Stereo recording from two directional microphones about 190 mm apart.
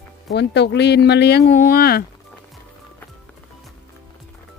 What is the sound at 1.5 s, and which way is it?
Speech, 45° left (ahead or behind).